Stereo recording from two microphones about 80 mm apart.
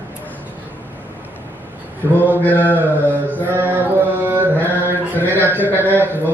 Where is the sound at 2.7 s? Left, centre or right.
Right.